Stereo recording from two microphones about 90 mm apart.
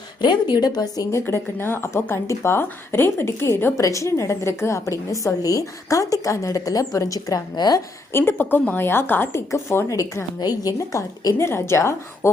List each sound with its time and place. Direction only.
0.2 s a woman's voice: 55° left (ahead or behind)
1.2 s speech: 25° left (ahead or behind)
3.8 s a woman's voice: 35° left (ahead or behind)
8.1 s speech: 25° left (ahead or behind)